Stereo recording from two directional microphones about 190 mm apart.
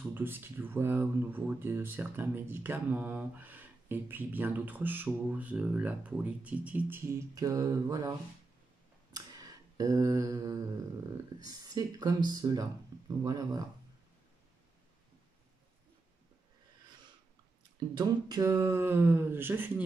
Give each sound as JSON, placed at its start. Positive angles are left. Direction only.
{"t": 0.1, "sound": "speech", "side_deg": -10}
{"t": 9.1, "sound": "mantra", "side_deg": -20}
{"t": 11.4, "sound": "speech", "side_deg": -20}
{"t": 17.7, "sound": "speech", "side_deg": -20}